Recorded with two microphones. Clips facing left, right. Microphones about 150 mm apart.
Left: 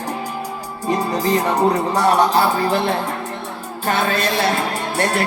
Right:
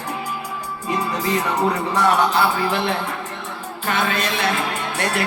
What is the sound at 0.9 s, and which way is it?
Music, 40° left (ahead or behind).